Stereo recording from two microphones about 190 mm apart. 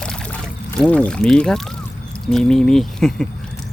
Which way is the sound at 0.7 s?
5° left (ahead or behind).